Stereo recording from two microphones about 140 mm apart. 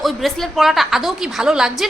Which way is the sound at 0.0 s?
Centre (ahead or behind).